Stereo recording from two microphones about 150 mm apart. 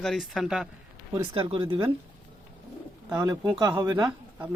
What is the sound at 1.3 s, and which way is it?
Speech, 35° right (ahead or behind).